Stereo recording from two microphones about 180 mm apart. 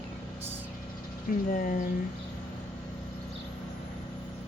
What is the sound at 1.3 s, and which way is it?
Speech, 50° left (ahead or behind).